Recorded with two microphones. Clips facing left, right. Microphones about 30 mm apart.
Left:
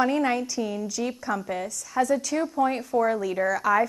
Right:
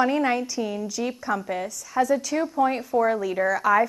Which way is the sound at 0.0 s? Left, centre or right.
Centre.